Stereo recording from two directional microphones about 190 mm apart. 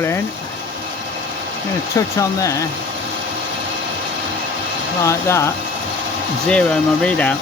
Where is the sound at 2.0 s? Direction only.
15° left (ahead or behind).